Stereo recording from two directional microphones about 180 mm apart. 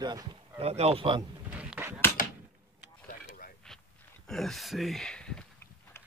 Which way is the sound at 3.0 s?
55° left (ahead or behind).